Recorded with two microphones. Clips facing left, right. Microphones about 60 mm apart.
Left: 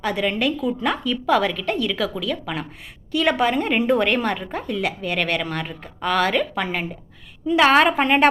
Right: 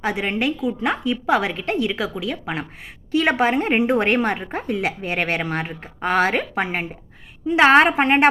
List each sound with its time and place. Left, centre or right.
0.0 s a woman's voice: right
3.8 s a woman's voice: right